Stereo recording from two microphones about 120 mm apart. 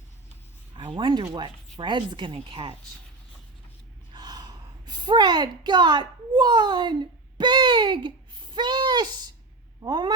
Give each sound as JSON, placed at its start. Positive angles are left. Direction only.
{"t": 0.8, "sound": "speech", "side_deg": -45}
{"t": 4.1, "sound": "gasp", "side_deg": -35}
{"t": 9.8, "sound": "speech", "side_deg": -35}